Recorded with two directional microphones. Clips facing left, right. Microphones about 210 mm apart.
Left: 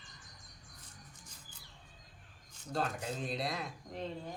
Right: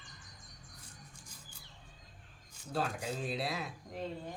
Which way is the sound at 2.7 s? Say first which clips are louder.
Even; 5° right (ahead or behind).